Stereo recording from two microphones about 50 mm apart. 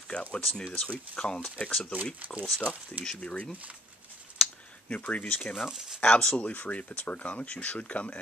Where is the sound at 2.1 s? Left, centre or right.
Right.